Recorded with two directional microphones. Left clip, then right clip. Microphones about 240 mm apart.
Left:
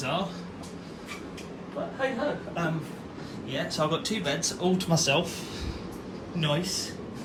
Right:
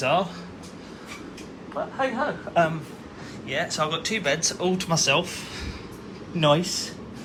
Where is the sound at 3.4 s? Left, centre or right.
Centre.